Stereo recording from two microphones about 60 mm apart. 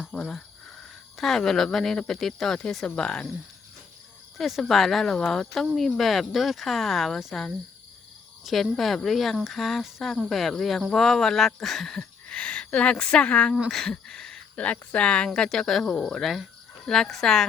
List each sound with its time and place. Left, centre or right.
0.0 s a sound: centre
1.1 s speech: centre
4.4 s speech: centre
8.4 s speech: centre
12.3 s speech: centre
13.7 s speech: centre
15.4 s speech: centre